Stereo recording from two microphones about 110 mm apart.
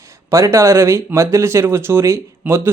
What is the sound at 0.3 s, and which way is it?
Speech, 25° right (ahead or behind).